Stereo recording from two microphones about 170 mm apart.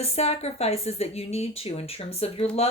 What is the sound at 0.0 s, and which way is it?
Speech, 40° left (ahead or behind).